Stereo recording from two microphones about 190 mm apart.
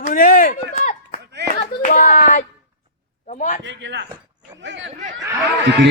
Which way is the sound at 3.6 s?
70° right (ahead or behind).